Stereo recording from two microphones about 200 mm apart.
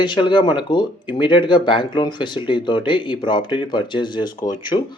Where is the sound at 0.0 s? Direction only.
25° left (ahead or behind).